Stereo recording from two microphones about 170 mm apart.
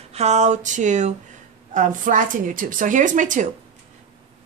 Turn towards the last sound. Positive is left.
turn(degrees=-45)  # may be behind; listen again after turning